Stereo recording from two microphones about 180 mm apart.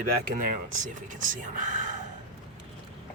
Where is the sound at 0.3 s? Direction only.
50° right (ahead or behind).